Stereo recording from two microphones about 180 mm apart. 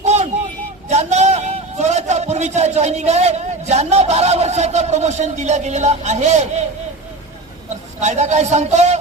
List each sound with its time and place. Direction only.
0.0 s vehicle: 40° right (ahead or behind)
0.9 s a man's voice: 40° right (ahead or behind)
8.0 s a man's voice: 40° right (ahead or behind)